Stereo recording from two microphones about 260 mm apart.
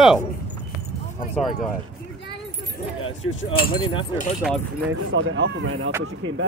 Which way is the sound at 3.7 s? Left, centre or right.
Centre.